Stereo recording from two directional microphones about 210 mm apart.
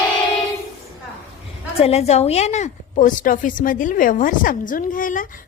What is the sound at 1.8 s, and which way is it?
A woman's voice, 30° left (ahead or behind).